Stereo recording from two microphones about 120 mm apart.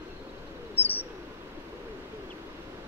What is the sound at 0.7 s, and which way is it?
Bird, 15° left (ahead or behind).